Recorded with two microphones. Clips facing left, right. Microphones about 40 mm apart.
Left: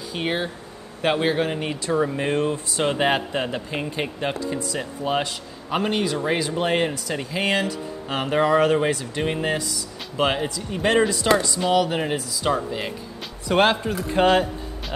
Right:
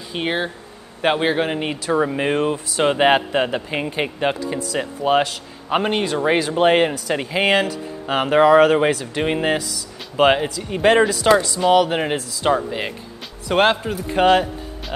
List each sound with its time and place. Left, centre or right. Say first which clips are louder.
0.1 s speech: right 3 dB; centre